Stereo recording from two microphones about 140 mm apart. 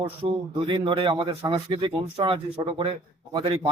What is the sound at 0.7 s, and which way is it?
Speech, 35° right (ahead or behind).